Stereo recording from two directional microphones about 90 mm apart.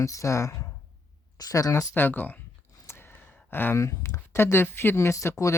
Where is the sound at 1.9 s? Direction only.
20° left (ahead or behind).